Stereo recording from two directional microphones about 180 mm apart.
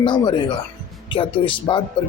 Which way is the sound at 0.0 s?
25° left (ahead or behind).